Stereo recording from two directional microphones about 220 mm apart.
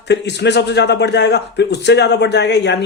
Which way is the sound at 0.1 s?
50° left (ahead or behind).